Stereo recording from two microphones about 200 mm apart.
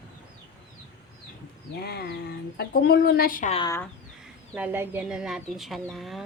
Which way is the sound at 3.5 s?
25° left (ahead or behind).